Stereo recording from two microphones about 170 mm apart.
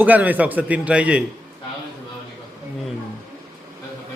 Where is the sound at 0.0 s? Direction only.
10° right (ahead or behind).